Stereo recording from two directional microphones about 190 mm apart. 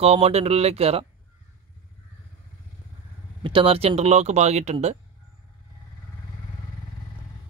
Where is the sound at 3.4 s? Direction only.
25° right (ahead or behind).